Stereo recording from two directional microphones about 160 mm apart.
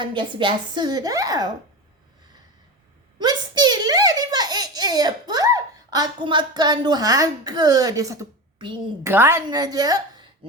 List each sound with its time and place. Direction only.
0.0 s a woman's voice: 30° right (ahead or behind)
3.2 s baby laughter: 25° right (ahead or behind)
8.5 s a woman's voice: 30° right (ahead or behind)
9.0 s a woman's voice: 15° right (ahead or behind)
9.5 s speech: 25° right (ahead or behind)